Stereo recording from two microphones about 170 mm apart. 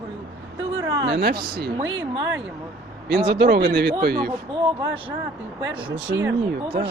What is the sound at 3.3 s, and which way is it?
Speech, 75° right (ahead or behind).